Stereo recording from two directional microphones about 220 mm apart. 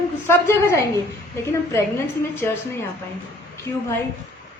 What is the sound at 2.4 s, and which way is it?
Speech, 10° left (ahead or behind).